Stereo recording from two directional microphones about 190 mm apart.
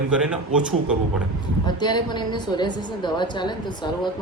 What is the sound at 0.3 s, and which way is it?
Speech, 5° right (ahead or behind).